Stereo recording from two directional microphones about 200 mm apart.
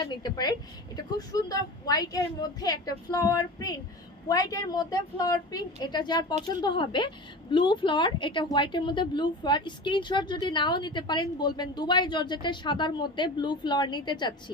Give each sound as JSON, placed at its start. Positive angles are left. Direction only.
{"t": 0.0, "sound": "a woman's voice", "side_deg": 20}